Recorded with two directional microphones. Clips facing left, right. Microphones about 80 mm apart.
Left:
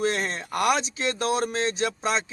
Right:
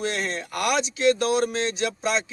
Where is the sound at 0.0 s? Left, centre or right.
Left.